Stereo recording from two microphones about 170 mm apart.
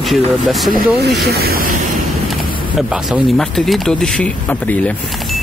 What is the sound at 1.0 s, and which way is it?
Speech, 75° right (ahead or behind).